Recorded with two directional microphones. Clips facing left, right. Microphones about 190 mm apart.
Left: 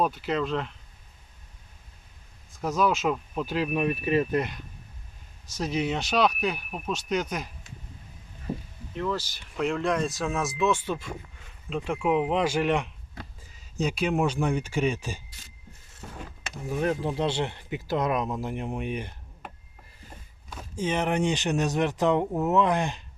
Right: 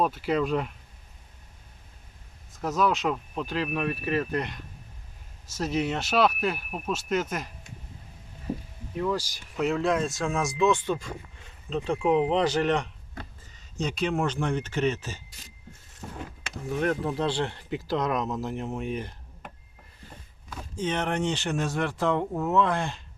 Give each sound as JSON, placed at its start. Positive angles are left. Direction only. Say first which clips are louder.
{"t": 0.0, "sound": "speech", "louder": "right 1 dB", "side_deg": -5}
{"t": 2.6, "sound": "speech", "louder": "even", "side_deg": 0}
{"t": 5.5, "sound": "speech", "louder": "even", "side_deg": 0}
{"t": 9.0, "sound": "speech", "louder": "right 2 dB", "side_deg": -10}
{"t": 17.0, "sound": "speech", "louder": "even", "side_deg": 25}
{"t": 20.7, "sound": "speech", "louder": "left 2 dB", "side_deg": 10}